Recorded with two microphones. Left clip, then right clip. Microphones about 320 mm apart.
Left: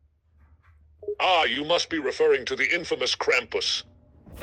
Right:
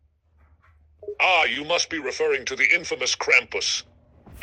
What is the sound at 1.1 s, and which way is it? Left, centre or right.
Speech, centre.